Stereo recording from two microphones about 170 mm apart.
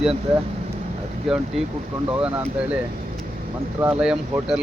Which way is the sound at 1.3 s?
Centre (ahead or behind).